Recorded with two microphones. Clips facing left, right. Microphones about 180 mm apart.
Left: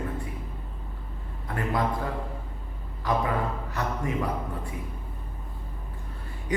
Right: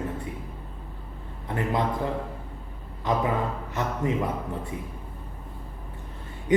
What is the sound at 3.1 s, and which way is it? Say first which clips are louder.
A man's voice: right 1 dB; 20° right (ahead or behind).